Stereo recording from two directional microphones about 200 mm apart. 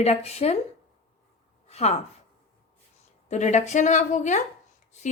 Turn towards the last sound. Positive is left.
turn(degrees=35)  # may be behind; listen again after turning